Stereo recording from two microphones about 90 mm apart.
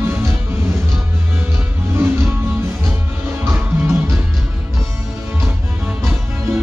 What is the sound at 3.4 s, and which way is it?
Music, 25° right (ahead or behind).